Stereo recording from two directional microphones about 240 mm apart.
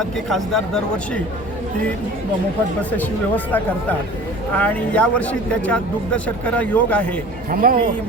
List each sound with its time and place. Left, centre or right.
0.3 s a man's voice: centre
3.0 s a man's voice: centre
7.5 s speech: right